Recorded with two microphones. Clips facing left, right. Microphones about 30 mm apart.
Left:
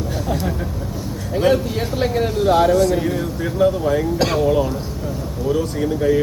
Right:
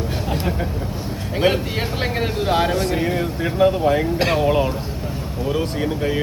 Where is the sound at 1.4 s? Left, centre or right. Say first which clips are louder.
Left 2 dB; right.